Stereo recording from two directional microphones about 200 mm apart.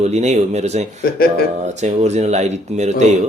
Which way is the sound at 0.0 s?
35° right (ahead or behind).